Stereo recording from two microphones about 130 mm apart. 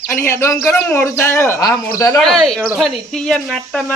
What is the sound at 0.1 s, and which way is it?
A man's voice, 20° left (ahead or behind).